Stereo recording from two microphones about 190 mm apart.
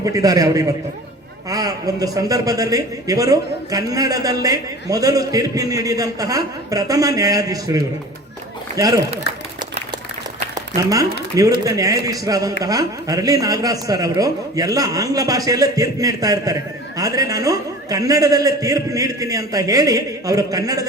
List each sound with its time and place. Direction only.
0.0 s a man's voice: 20° right (ahead or behind)
10.5 s a man's voice: 20° right (ahead or behind)